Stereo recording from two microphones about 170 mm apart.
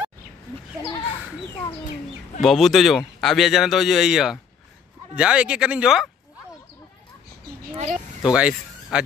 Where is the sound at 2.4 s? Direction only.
Centre (ahead or behind).